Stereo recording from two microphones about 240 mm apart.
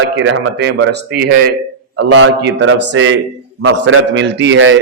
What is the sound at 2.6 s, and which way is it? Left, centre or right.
A man's voice, right.